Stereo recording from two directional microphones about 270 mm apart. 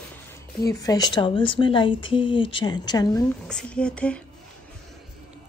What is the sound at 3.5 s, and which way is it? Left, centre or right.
Speech, centre.